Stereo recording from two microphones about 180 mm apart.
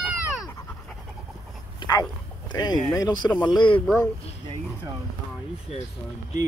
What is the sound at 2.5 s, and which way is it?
Speech, 20° left (ahead or behind).